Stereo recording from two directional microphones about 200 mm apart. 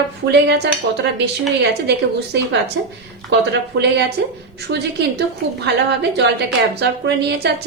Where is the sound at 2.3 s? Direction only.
55° right (ahead or behind).